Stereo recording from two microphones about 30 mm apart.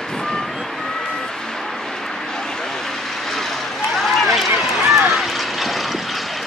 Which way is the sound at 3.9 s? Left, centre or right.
Centre.